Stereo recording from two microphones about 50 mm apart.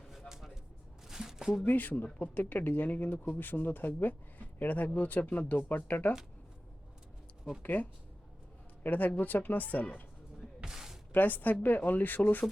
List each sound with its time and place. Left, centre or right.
0.1 s music: centre
1.0 s a sound: centre
1.6 s speech: left
7.6 s speech: left
10.6 s a sound: centre
11.1 s speech: left